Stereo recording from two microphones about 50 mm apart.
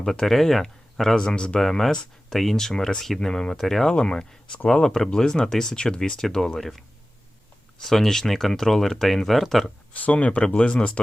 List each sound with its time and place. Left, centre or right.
0.0 s speech: centre
3.9 s speech: centre
6.0 s speech: centre
9.9 s speech: left